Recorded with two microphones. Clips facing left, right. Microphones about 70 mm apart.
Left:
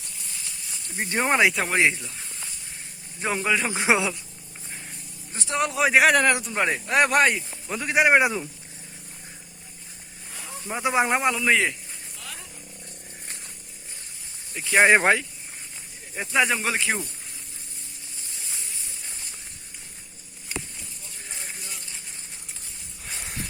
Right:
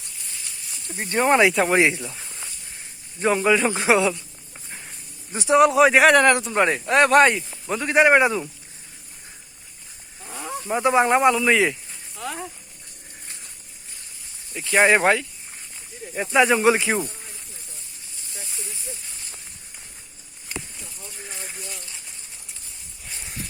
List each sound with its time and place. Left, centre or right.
0.9 s speech: centre
3.8 s speech: centre
5.4 s speech: centre
10.2 s wild animals: right
10.7 s speech: centre
12.2 s dog: right
14.7 s speech: centre
16.1 s speech: centre
16.6 s speech: centre